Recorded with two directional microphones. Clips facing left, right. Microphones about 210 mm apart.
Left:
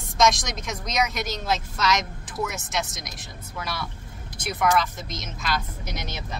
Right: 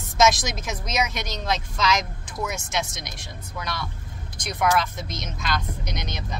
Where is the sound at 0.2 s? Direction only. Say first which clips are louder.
Right 2 dB; centre (ahead or behind).